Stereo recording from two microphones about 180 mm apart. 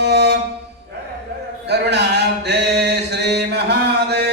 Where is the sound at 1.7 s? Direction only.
70° right (ahead or behind).